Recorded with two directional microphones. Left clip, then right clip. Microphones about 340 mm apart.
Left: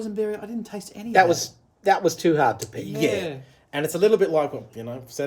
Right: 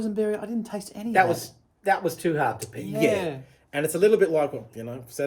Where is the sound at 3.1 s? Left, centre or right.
Centre.